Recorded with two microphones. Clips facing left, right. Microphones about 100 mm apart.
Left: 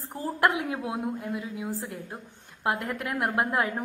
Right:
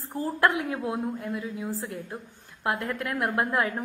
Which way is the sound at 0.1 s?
20° left (ahead or behind).